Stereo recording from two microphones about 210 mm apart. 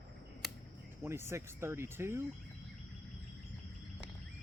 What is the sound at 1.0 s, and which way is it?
Speech, 10° right (ahead or behind).